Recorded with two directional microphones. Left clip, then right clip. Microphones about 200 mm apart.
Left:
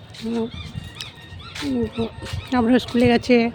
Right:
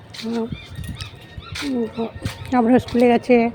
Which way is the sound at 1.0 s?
5° left (ahead or behind).